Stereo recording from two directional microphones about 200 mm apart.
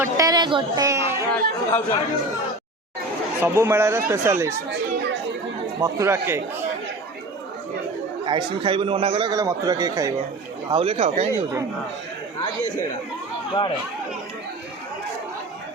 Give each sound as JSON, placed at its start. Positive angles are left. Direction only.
{"t": 0.0, "sound": "a sound", "side_deg": -20}
{"t": 1.3, "sound": "speech", "side_deg": 10}
{"t": 3.4, "sound": "speech", "side_deg": -10}
{"t": 5.8, "sound": "speech", "side_deg": -15}
{"t": 8.2, "sound": "a man's voice", "side_deg": -25}
{"t": 10.7, "sound": "speech", "side_deg": -30}
{"t": 13.5, "sound": "speech", "side_deg": 25}